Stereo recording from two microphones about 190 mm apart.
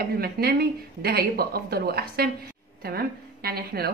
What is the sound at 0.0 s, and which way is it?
A woman's voice, 50° right (ahead or behind).